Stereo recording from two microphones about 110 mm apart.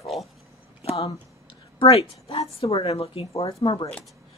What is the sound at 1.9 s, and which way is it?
Speech, 55° left (ahead or behind).